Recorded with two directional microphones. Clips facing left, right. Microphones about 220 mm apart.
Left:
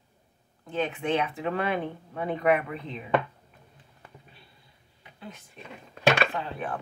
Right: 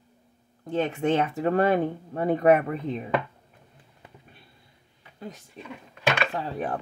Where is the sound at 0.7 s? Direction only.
45° right (ahead or behind).